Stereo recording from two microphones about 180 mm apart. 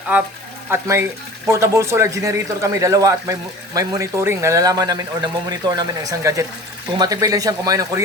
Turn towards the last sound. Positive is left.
turn(degrees=-20)  # may be behind; listen again after turning